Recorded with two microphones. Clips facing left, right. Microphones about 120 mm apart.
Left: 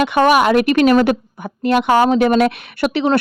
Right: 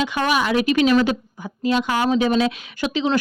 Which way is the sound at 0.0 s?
60° left (ahead or behind).